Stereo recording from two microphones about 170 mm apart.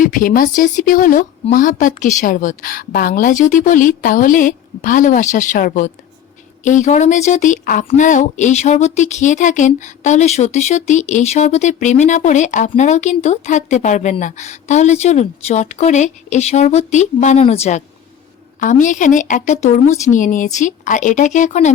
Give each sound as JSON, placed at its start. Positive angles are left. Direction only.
{"t": 0.0, "sound": "speech", "side_deg": 50}